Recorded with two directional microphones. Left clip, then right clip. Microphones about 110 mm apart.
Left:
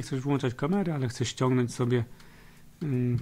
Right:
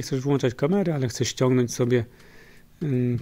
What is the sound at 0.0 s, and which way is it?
Speech, 35° right (ahead or behind).